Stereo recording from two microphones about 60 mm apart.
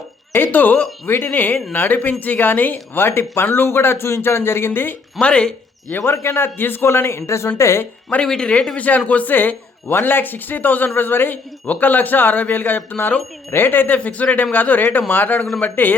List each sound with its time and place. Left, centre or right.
0.3 s speech: left
5.2 s speech: centre
6.0 s a man's voice: left
8.2 s speech: centre; by 16.0 s left